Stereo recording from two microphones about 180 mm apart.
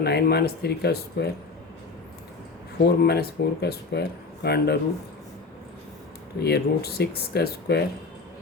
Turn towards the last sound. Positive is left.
turn(degrees=65)  # may be behind; listen again after turning